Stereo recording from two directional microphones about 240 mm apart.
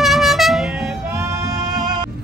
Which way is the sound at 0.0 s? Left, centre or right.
Centre.